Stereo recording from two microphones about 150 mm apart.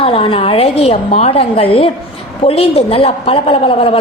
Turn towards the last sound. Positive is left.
turn(degrees=40)  # may be behind; listen again after turning